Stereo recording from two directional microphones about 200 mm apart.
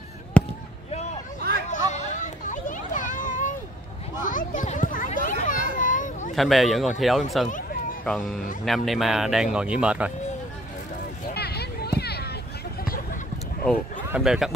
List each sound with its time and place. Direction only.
0.3 s fireworks: 5° left (ahead or behind)
1.7 s children playing: 35° left (ahead or behind)
6.3 s speech: centre (ahead or behind)
11.3 s a sound: 55° left (ahead or behind)
14.1 s speech: 5° right (ahead or behind)